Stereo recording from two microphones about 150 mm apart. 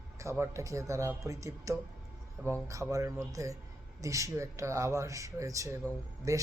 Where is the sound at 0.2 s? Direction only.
20° right (ahead or behind).